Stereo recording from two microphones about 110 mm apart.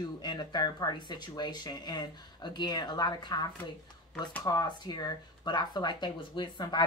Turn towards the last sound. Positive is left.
turn(degrees=45)  # may be behind; listen again after turning